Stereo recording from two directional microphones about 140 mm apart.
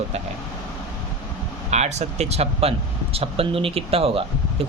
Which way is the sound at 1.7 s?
55° right (ahead or behind).